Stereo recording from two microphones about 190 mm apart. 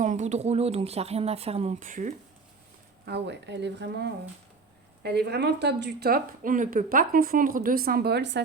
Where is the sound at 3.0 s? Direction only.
60° right (ahead or behind).